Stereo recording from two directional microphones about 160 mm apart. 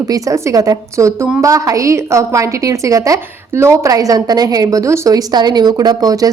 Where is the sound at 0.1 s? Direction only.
20° right (ahead or behind).